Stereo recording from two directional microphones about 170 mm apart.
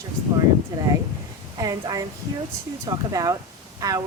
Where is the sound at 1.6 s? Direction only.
20° right (ahead or behind).